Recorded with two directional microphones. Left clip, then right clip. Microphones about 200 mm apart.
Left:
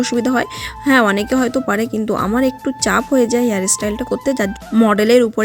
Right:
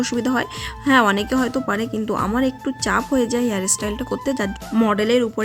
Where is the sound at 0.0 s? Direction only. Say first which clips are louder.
Left 5 dB; 20° left (ahead or behind).